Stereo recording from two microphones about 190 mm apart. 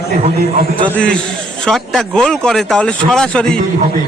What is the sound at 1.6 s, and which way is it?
A man's voice, centre (ahead or behind).